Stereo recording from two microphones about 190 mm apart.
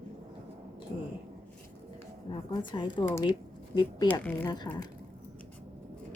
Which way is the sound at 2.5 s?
25° left (ahead or behind).